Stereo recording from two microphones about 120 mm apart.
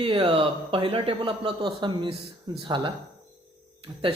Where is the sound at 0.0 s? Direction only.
45° right (ahead or behind).